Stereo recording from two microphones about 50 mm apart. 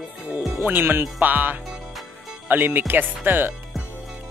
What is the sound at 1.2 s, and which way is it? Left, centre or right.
Speech, right.